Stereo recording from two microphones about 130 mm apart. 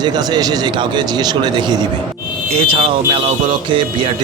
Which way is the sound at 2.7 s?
45° right (ahead or behind).